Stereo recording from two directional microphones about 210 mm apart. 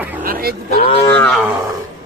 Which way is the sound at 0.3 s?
45° right (ahead or behind).